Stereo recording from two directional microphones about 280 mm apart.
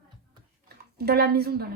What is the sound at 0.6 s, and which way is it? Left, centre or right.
Speech, right.